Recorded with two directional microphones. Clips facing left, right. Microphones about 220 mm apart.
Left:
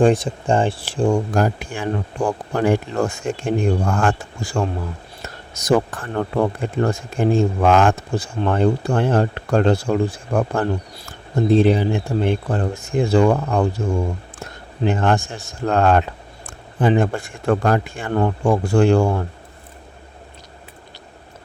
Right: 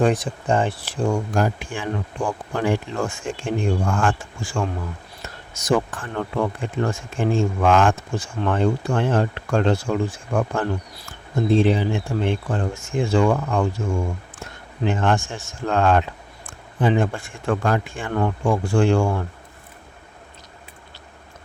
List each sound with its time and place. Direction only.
0.0 s speech: 25° left (ahead or behind)